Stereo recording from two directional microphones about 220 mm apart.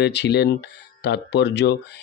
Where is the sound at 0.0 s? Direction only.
50° left (ahead or behind).